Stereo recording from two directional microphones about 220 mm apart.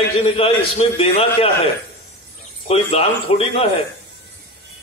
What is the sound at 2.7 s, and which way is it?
Speech, 25° left (ahead or behind).